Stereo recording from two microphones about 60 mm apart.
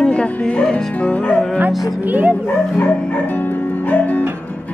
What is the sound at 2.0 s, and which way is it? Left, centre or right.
Speech, right.